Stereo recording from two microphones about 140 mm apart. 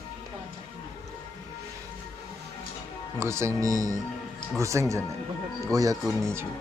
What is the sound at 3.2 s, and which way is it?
Speech, 20° right (ahead or behind).